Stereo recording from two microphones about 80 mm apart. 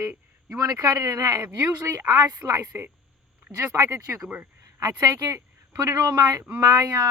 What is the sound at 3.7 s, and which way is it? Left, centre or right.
Speech, right.